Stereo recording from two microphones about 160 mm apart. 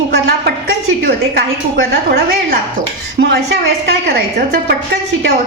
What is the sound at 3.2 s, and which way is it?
A woman's voice, 90° right.